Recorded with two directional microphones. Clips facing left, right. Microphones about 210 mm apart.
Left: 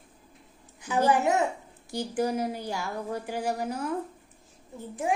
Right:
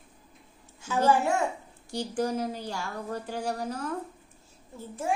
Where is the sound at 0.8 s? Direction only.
15° left (ahead or behind).